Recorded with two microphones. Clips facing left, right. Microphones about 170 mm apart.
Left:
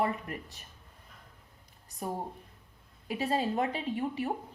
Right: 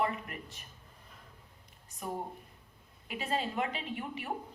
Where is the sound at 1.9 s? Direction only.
35° left (ahead or behind).